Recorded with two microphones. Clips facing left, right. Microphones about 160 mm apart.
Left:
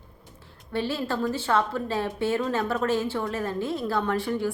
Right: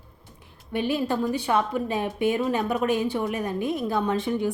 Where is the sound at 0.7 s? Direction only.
15° right (ahead or behind).